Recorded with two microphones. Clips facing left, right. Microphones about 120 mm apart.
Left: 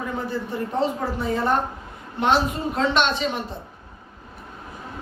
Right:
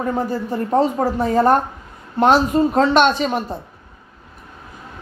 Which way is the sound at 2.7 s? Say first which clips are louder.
Right 5 dB; 45° right (ahead or behind).